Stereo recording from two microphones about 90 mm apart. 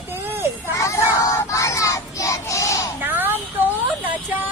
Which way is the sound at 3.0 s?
20° right (ahead or behind).